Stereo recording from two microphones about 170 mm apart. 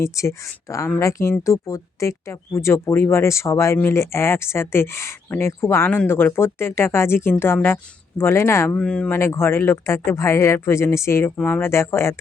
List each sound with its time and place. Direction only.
0.0 s speech: 15° left (ahead or behind)